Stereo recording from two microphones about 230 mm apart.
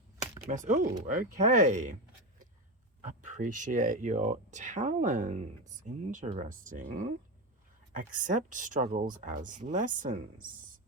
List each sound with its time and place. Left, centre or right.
0.5 s speech: right
3.0 s speech: right